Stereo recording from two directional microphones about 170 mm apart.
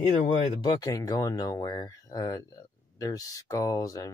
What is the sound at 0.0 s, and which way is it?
Speech, 45° left (ahead or behind).